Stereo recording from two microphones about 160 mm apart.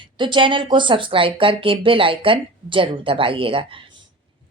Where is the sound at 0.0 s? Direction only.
30° right (ahead or behind).